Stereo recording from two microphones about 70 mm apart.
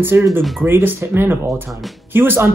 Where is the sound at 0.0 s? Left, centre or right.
Right.